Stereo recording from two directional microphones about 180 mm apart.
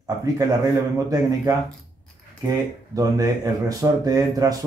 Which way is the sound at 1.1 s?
15° right (ahead or behind).